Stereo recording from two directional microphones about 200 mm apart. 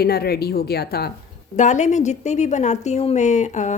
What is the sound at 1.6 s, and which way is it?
A woman's voice, 35° left (ahead or behind).